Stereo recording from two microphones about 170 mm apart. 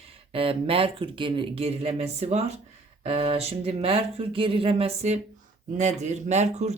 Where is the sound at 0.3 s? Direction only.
35° right (ahead or behind).